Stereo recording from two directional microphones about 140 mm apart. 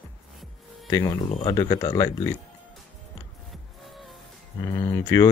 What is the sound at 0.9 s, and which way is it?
Speech, 25° left (ahead or behind).